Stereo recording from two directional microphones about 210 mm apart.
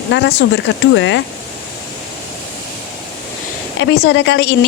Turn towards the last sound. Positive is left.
turn(degrees=55)  # may be behind; listen again after turning